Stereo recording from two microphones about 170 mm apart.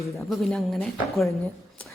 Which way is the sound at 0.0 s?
Centre (ahead or behind).